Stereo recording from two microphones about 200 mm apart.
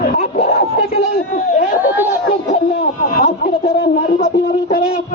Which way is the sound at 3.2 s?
50° left (ahead or behind).